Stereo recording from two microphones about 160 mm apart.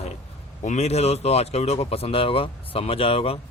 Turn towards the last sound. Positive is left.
turn(degrees=35)  # may be behind; listen again after turning